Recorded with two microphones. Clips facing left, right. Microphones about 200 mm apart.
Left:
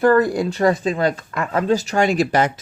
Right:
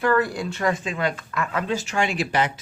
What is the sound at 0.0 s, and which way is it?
Speech, 40° left (ahead or behind).